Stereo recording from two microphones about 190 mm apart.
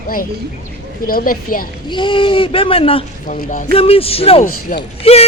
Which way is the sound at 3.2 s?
40° left (ahead or behind).